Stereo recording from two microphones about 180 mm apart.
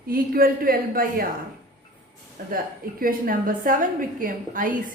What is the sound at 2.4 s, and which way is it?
A woman's voice, 50° right (ahead or behind).